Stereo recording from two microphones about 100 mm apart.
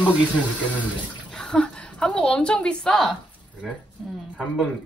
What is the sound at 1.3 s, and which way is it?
A woman's voice, 10° left (ahead or behind).